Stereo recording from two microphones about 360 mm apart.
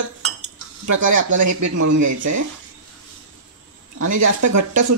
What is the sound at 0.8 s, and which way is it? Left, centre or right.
Speech, right.